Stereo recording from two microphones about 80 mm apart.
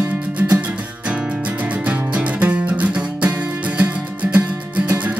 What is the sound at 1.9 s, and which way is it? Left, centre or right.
Music, centre.